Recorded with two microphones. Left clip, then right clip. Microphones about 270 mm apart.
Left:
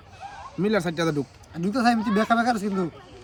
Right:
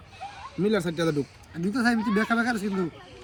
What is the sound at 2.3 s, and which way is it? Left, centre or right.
Speech, left.